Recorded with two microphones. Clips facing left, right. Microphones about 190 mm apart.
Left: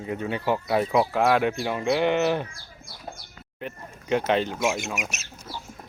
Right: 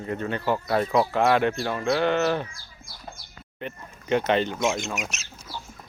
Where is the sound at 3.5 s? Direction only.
5° left (ahead or behind).